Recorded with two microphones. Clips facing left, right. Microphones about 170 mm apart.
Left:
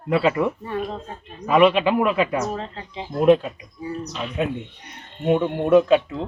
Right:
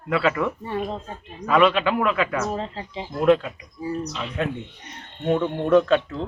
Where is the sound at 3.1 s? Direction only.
20° left (ahead or behind).